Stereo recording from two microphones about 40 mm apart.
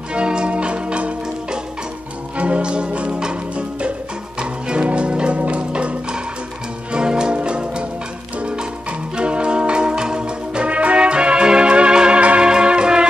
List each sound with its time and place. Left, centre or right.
0.1 s music: right
12.4 s music: right